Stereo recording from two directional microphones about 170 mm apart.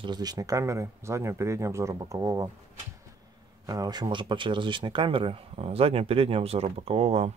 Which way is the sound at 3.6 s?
20° right (ahead or behind).